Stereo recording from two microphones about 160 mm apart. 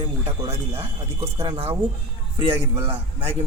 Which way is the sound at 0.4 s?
35° right (ahead or behind).